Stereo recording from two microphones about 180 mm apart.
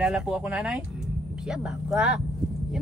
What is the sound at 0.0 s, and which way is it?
Speech, 5° right (ahead or behind).